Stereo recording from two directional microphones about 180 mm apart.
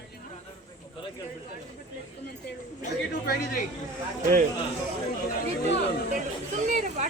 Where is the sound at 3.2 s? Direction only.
55° left (ahead or behind).